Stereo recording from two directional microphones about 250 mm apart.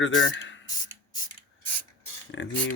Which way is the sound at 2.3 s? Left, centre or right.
Left.